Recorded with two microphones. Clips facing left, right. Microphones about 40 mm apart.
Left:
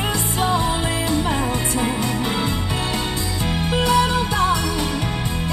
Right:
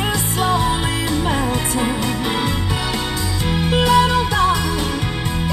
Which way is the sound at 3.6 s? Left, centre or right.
Right.